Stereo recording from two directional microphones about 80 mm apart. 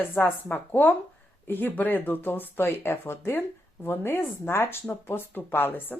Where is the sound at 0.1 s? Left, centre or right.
Left.